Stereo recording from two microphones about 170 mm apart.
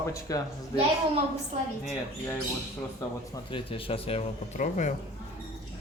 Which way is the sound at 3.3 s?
30° left (ahead or behind).